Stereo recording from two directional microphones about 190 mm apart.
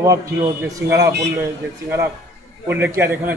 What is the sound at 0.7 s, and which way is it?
Speech, 15° right (ahead or behind).